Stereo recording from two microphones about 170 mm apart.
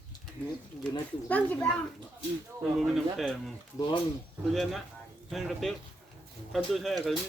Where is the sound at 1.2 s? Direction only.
10° left (ahead or behind).